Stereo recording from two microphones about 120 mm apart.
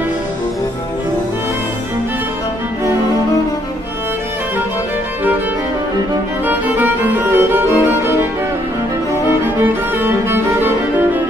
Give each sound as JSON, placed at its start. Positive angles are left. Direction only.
{"t": 6.4, "sound": "music", "side_deg": -15}
{"t": 9.7, "sound": "music", "side_deg": -20}